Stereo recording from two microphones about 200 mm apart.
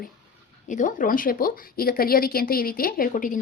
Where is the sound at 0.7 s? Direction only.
40° left (ahead or behind).